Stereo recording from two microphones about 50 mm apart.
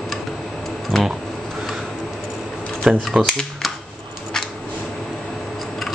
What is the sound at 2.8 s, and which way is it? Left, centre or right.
Speech, centre.